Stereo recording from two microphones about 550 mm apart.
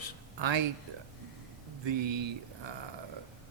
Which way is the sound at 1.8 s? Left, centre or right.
Right.